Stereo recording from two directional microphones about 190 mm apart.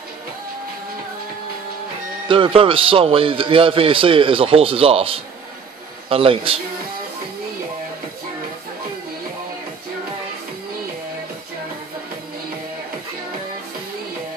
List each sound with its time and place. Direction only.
2.2 s a man's voice: 25° right (ahead or behind)